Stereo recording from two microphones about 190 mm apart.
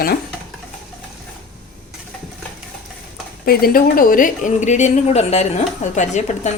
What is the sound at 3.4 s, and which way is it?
Speech, 50° left (ahead or behind).